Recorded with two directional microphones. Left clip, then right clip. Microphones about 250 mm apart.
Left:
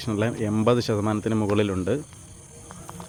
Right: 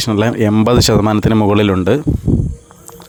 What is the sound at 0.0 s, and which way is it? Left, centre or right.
Speech, right.